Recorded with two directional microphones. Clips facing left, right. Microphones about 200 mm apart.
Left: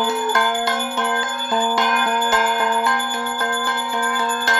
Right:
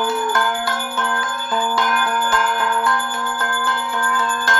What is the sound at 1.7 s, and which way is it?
Bell, 20° left (ahead or behind).